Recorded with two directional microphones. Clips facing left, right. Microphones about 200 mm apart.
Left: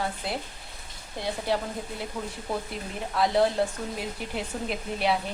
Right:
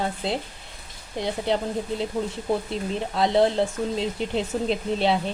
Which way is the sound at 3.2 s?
25° right (ahead or behind).